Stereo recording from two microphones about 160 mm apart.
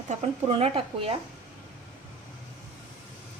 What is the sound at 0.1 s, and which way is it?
Speech, 40° right (ahead or behind).